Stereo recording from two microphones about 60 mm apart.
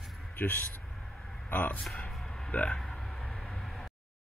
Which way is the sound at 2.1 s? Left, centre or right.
Centre.